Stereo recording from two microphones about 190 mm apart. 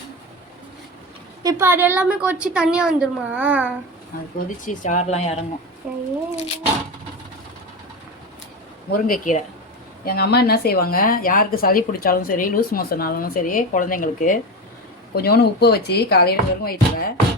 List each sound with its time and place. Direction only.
1.5 s a woman's voice: 15° right (ahead or behind)
4.4 s speech: 45° left (ahead or behind)
5.8 s speech: 5° right (ahead or behind)
8.9 s a woman's voice: 45° left (ahead or behind)
10.1 s a woman's voice: 55° left (ahead or behind)
15.1 s speech: 55° left (ahead or behind)